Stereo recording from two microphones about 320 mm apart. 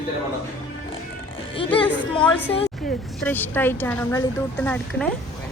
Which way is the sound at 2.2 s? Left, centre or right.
Centre.